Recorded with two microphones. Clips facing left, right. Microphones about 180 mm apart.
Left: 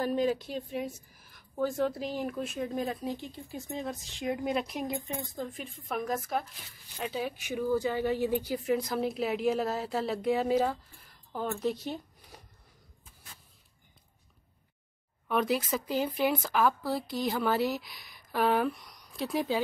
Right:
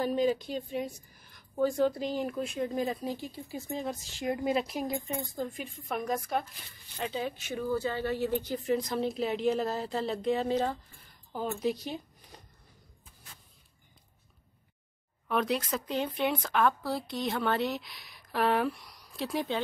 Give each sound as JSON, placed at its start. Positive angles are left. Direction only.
{"t": 0.0, "sound": "speech", "side_deg": 0}
{"t": 15.2, "sound": "speech", "side_deg": 0}